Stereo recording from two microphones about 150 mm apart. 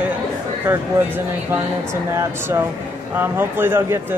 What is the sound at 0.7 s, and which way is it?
Speech, 15° right (ahead or behind).